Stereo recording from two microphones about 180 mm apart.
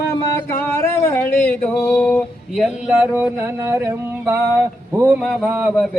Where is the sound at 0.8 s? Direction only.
15° left (ahead or behind).